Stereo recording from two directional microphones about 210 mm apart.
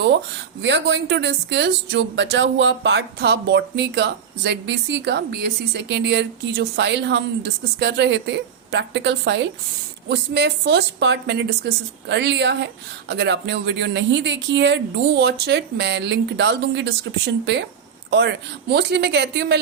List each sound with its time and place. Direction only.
0.6 s speech: 55° right (ahead or behind)